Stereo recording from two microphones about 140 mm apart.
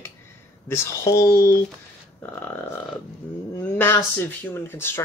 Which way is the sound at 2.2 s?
10° left (ahead or behind).